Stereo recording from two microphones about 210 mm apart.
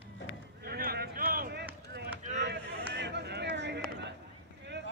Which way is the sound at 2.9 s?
55° right (ahead or behind).